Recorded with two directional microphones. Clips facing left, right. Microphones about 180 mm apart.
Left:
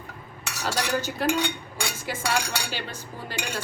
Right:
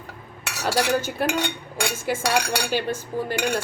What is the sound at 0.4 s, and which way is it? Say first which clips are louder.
Cutlery: right 6 dB; 60° right (ahead or behind).